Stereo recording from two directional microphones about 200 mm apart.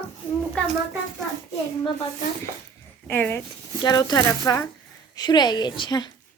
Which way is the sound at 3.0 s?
10° left (ahead or behind).